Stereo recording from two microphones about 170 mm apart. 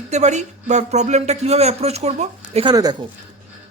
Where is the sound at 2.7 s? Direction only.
20° right (ahead or behind).